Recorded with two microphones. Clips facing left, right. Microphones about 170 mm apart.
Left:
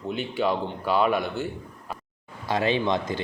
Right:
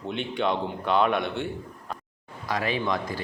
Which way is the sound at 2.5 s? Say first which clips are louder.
Left 3 dB; 25° left (ahead or behind).